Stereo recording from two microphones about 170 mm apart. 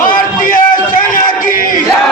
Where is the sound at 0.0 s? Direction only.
55° left (ahead or behind).